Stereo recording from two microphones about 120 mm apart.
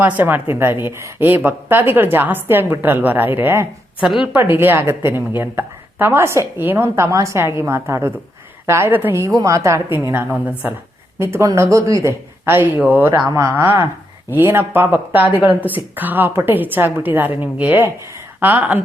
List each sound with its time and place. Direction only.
0.0 s a woman's voice: 15° right (ahead or behind)
11.2 s a woman's voice: 20° right (ahead or behind)